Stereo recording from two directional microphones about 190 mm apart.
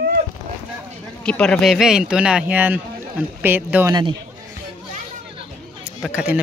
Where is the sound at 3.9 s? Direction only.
25° right (ahead or behind).